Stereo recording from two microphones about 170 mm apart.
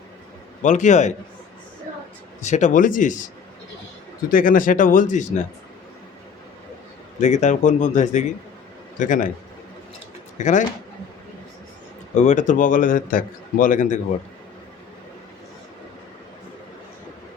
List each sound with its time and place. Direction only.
0.6 s a man's voice: 45° left (ahead or behind)
2.4 s a man's voice: 45° left (ahead or behind)
4.3 s a man's voice: 55° left (ahead or behind)
7.2 s a man's voice: 45° left (ahead or behind)
10.3 s speech: 45° left (ahead or behind)
12.1 s a man's voice: 45° left (ahead or behind)